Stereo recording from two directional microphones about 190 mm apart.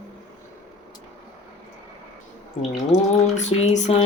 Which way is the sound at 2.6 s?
35° left (ahead or behind).